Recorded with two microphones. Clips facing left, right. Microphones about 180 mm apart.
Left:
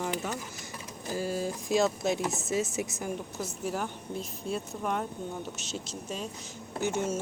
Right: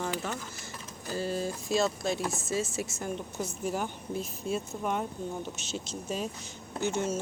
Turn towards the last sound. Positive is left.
turn(degrees=10)  # may be behind; listen again after turning